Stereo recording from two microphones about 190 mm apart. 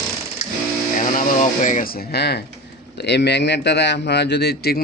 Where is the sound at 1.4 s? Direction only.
40° left (ahead or behind).